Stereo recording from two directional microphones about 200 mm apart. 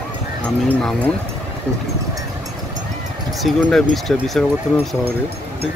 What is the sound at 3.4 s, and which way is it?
Speech, centre (ahead or behind).